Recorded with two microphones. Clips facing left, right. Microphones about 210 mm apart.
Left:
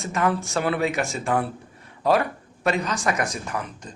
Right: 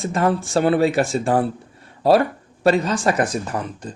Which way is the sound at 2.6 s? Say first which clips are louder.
Right 6 dB; 30° right (ahead or behind).